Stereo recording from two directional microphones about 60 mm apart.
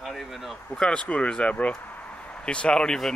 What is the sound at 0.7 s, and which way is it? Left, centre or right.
Speech, centre.